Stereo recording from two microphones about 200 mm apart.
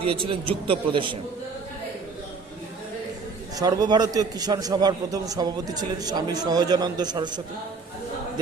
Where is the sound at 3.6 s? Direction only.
20° right (ahead or behind).